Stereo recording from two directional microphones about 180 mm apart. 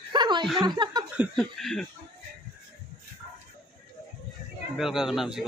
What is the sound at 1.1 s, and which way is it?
Speech, 5° right (ahead or behind).